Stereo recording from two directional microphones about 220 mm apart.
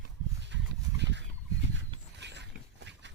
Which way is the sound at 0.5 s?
50° right (ahead or behind).